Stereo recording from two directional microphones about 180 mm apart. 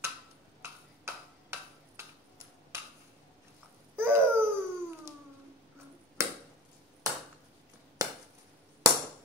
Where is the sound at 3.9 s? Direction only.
10° right (ahead or behind).